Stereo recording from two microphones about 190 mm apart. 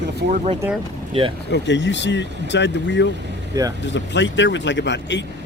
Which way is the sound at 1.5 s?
70° left (ahead or behind).